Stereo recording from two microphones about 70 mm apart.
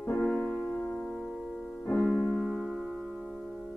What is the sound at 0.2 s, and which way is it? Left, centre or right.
Music, centre.